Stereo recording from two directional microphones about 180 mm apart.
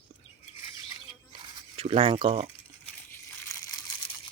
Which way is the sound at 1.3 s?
30° right (ahead or behind).